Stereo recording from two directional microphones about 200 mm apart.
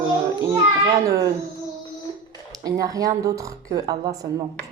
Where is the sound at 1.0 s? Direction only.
15° right (ahead or behind).